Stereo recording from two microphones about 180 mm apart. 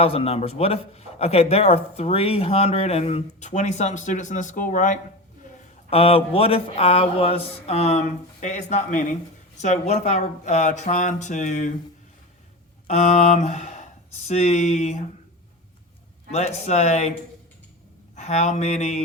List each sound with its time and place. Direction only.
0.0 s speech: 35° left (ahead or behind)
5.9 s speech: 30° left (ahead or behind)
12.9 s speech: 35° left (ahead or behind)
16.3 s speech: 35° left (ahead or behind)
18.2 s speech: 40° left (ahead or behind)